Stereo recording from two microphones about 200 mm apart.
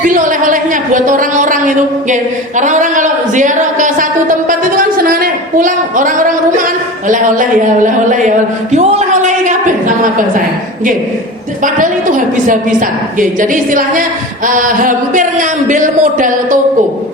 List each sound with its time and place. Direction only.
0.0 s a woman's voice: 40° right (ahead or behind)
11.6 s a woman's voice: 40° right (ahead or behind)